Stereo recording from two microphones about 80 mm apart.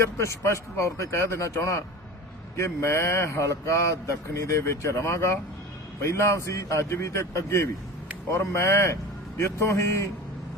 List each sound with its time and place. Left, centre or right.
0.2 s speech: left